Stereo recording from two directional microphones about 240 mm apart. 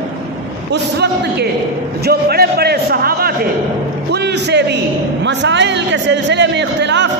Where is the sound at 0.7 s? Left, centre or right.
Right.